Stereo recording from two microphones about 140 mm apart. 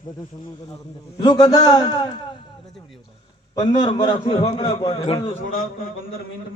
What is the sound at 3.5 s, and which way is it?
Speech, 30° left (ahead or behind).